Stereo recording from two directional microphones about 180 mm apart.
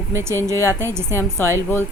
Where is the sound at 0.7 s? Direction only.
15° right (ahead or behind).